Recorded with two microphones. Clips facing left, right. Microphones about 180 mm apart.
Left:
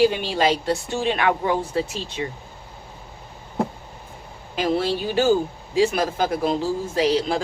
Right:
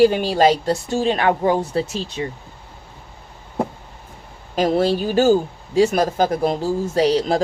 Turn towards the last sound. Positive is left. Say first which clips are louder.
# right 3 dB
turn(degrees=-40)  # may be behind; listen again after turning